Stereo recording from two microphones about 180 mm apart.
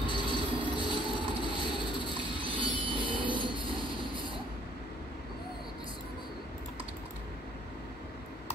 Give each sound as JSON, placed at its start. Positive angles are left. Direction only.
{"t": 0.0, "sound": "train", "side_deg": 25}
{"t": 2.1, "sound": "train", "side_deg": -30}
{"t": 2.8, "sound": "vehicle", "side_deg": -30}
{"t": 3.3, "sound": "train", "side_deg": -25}